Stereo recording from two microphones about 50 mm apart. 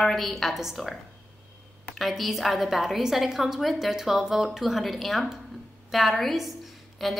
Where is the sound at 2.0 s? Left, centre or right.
Centre.